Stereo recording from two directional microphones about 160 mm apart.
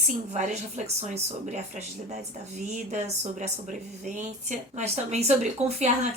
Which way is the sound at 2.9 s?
45° right (ahead or behind).